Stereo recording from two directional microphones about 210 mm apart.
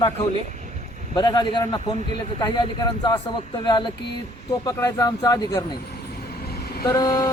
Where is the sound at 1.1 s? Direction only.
20° left (ahead or behind).